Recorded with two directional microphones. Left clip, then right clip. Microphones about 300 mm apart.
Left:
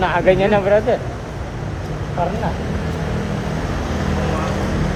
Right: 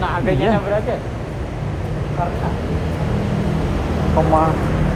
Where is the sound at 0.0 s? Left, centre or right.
Left.